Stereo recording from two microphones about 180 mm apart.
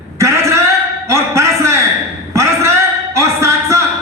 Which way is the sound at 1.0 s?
15° right (ahead or behind).